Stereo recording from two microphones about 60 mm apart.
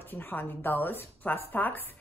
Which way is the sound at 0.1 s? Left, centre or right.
Left.